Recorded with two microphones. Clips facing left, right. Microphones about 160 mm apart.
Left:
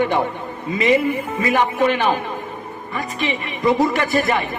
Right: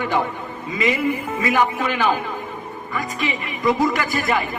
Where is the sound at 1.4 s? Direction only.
30° left (ahead or behind).